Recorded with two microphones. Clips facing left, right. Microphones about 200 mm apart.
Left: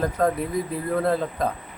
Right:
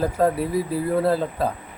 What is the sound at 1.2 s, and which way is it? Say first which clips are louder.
Speech: right 2 dB; 30° right (ahead or behind).